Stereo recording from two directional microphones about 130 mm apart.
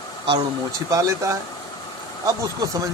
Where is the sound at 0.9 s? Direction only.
25° right (ahead or behind).